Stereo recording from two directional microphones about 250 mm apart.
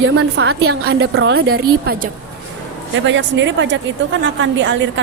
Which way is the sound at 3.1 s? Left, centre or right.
Right.